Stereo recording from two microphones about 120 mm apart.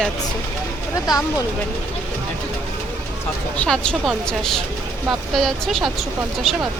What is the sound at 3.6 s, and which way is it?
Speech, 5° left (ahead or behind).